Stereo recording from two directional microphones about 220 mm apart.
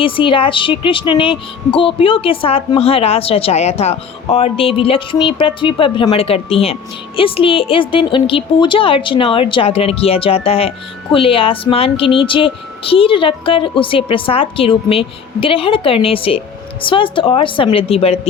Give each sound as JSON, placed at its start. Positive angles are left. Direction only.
{"t": 0.0, "sound": "a woman's voice", "side_deg": 25}